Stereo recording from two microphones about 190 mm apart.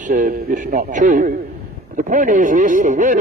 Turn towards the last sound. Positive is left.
turn(degrees=-40)  # may be behind; listen again after turning